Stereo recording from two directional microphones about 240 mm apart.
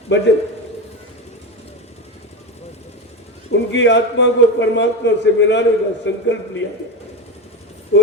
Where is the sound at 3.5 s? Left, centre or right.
Left.